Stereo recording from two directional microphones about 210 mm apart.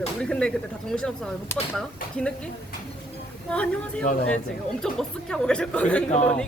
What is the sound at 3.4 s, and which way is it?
Speech, 5° left (ahead or behind).